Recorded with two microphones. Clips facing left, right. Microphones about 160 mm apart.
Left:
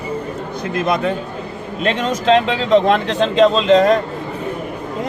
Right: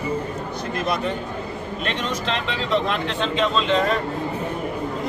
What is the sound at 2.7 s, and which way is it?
Speech, 40° left (ahead or behind).